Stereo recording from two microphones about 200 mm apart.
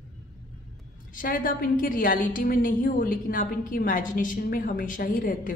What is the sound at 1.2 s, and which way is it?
A woman's voice, 45° left (ahead or behind).